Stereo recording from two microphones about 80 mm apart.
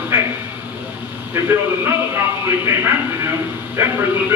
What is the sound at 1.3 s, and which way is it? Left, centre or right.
A man's voice, right.